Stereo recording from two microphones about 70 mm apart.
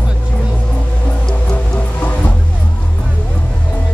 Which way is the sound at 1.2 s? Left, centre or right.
Centre.